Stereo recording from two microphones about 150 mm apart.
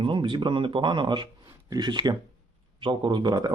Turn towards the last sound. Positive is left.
turn(degrees=-30)  # may be behind; listen again after turning